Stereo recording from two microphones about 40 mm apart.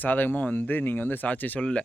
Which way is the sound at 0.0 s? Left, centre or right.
Left.